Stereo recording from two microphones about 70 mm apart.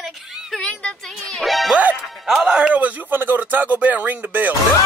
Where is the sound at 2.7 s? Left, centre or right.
Right.